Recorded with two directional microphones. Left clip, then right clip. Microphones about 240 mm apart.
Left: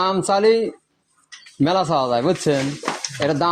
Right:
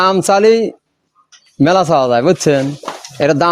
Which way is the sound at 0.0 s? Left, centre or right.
Right.